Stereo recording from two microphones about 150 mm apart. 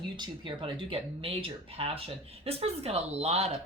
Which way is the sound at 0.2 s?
35° right (ahead or behind).